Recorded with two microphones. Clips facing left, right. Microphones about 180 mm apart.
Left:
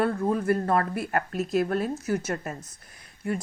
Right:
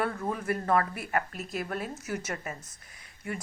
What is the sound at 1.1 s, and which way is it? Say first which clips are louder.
A woman's voice: left 6 dB; 40° left (ahead or behind).